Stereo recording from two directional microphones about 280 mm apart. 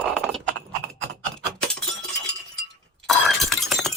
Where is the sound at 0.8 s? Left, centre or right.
Right.